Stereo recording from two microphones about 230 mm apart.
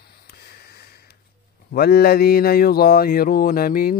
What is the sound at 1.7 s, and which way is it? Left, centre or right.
Speech, left.